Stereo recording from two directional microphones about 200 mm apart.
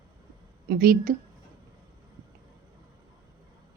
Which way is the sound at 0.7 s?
50° right (ahead or behind).